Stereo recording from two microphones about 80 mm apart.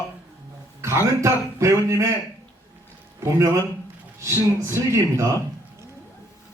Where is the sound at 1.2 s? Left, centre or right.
Right.